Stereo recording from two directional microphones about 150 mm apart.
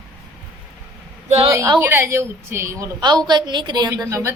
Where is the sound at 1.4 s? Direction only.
20° right (ahead or behind).